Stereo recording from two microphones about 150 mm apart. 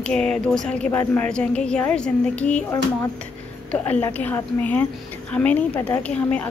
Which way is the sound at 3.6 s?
10° left (ahead or behind).